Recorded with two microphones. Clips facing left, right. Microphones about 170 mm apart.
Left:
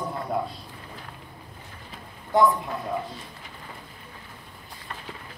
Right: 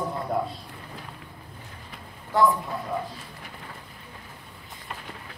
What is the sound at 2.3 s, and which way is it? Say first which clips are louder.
Speech: left 1 dB; 20° left (ahead or behind).